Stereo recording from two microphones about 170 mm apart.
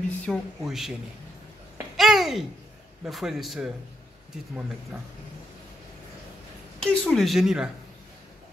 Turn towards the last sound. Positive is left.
turn(degrees=-5)  # may be behind; listen again after turning